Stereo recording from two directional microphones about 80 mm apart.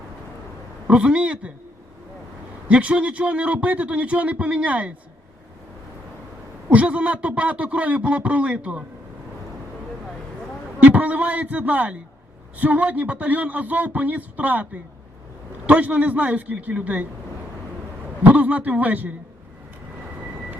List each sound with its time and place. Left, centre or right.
0.9 s a man's voice: centre
2.6 s a man's voice: centre
6.7 s a man's voice: centre
10.8 s speech: centre
18.2 s speech: centre